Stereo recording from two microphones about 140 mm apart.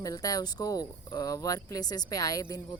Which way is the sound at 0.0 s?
25° left (ahead or behind).